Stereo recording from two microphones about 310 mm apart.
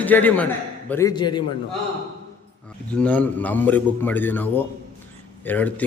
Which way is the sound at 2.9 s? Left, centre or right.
Centre.